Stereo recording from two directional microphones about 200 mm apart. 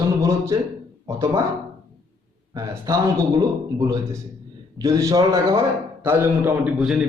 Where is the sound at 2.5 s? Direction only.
15° right (ahead or behind).